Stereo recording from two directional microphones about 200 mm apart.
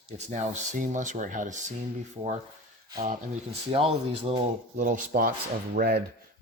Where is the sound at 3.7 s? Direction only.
30° right (ahead or behind).